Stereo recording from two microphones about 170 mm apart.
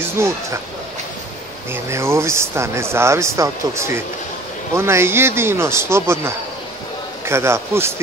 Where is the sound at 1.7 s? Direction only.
15° right (ahead or behind).